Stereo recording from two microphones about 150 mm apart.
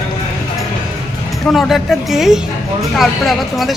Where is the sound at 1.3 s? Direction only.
Centre (ahead or behind).